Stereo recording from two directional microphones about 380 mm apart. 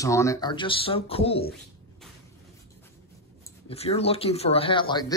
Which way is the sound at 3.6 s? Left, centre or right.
Centre.